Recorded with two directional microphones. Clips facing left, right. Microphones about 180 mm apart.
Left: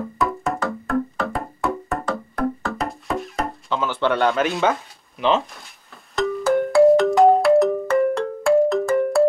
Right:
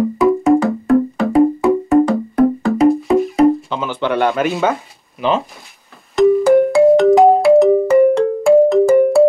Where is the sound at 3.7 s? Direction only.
15° right (ahead or behind).